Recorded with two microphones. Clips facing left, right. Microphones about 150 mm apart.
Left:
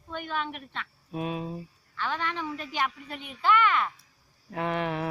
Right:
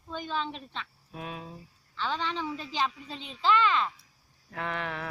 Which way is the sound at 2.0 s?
20° right (ahead or behind).